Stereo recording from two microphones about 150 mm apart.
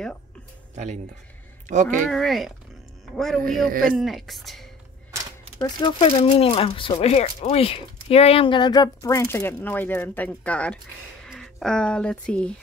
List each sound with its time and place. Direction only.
1.7 s speech: 55° right (ahead or behind)
2.0 s speech: centre (ahead or behind)
5.6 s speech: 35° left (ahead or behind); by 12.5 s 5° left (ahead or behind)